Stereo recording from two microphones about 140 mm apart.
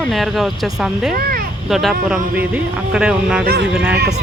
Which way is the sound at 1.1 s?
90° right.